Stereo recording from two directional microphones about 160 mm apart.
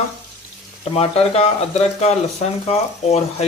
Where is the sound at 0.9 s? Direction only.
40° left (ahead or behind).